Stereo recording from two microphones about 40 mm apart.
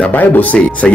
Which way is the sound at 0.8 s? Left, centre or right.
Centre.